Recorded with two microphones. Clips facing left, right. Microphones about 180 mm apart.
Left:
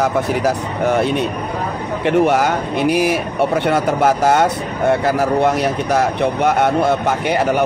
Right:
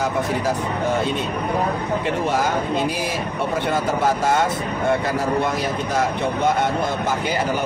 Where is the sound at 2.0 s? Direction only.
70° left (ahead or behind).